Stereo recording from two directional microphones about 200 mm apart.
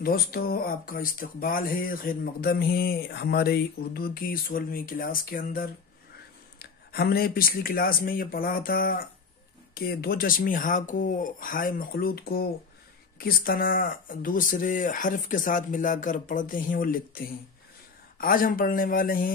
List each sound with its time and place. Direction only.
0.0 s speech: 50° left (ahead or behind)